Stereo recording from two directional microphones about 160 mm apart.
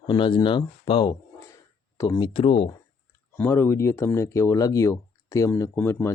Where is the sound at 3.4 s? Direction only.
15° left (ahead or behind).